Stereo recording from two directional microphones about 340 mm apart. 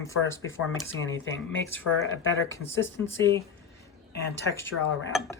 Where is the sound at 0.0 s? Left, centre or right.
Centre.